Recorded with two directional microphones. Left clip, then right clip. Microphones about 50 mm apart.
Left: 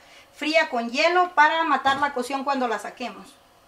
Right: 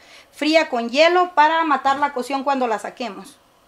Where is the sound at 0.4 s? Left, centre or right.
Right.